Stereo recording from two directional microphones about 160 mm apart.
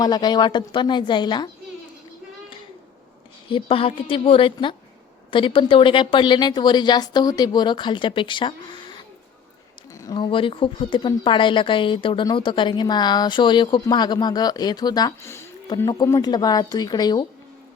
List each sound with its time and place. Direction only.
0.0 s speech: 25° left (ahead or behind)
3.5 s a woman's voice: 35° left (ahead or behind)